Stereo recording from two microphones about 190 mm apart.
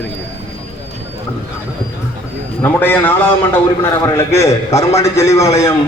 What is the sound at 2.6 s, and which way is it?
A man's voice, 10° left (ahead or behind).